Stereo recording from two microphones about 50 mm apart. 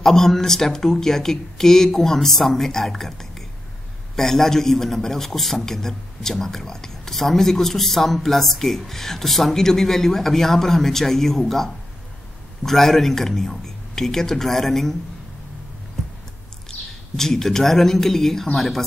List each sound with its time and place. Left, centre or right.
0.0 s a man's voice: centre
17.2 s speech: centre